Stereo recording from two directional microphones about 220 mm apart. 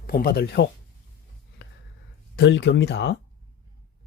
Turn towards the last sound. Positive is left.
turn(degrees=50)  # may be behind; listen again after turning